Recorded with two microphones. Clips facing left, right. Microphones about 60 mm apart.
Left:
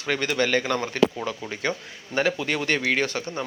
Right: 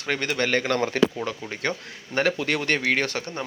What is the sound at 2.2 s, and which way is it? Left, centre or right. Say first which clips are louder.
Speech: right 1 dB; right.